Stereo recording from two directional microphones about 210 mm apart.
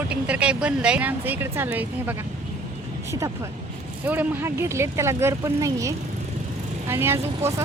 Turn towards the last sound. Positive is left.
turn(degrees=-10)  # may be behind; listen again after turning